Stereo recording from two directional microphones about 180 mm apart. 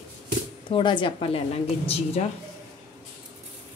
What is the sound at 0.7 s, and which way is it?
A woman's voice, 25° left (ahead or behind).